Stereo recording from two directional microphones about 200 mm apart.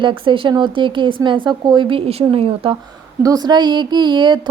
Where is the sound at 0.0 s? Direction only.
25° right (ahead or behind).